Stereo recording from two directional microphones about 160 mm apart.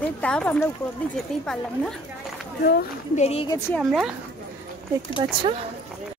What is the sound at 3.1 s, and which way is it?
Speech, 40° left (ahead or behind).